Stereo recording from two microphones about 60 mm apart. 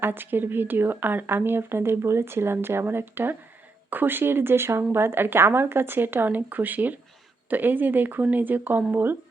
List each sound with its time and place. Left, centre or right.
0.0 s speech: right